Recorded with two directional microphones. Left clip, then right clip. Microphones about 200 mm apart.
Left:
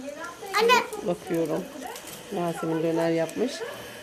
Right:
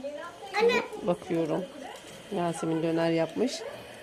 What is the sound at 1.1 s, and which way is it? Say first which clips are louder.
Speech: even; 15° right (ahead or behind).